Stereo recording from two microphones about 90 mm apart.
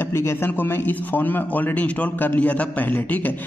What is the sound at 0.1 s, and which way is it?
A man's voice, 30° left (ahead or behind).